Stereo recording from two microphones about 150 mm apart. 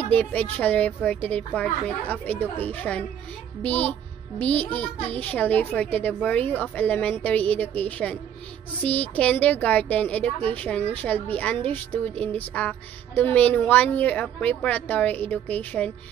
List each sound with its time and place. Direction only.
0.0 s a woman's voice: 10° left (ahead or behind)